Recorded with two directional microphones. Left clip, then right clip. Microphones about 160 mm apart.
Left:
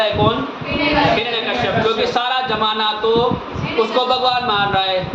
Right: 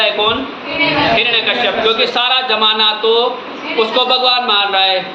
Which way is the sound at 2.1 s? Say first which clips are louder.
Right 4 dB; 5° left (ahead or behind).